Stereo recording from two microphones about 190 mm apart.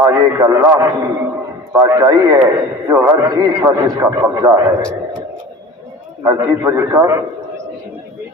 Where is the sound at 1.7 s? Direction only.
15° right (ahead or behind).